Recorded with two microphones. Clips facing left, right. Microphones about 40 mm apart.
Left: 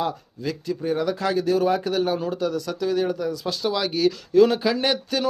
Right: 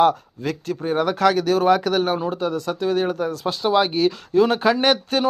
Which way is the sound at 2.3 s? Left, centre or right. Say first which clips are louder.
Right 2 dB; right.